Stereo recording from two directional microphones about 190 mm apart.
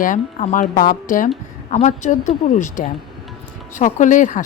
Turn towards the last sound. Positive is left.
turn(degrees=40)  # may be behind; listen again after turning